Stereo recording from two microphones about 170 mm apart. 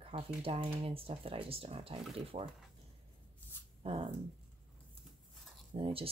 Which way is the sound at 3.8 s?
30° right (ahead or behind).